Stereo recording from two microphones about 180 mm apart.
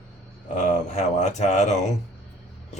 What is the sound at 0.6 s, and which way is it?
Speech, 40° left (ahead or behind).